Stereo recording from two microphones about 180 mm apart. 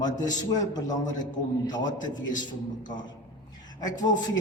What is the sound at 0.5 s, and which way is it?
A man's voice, 20° left (ahead or behind).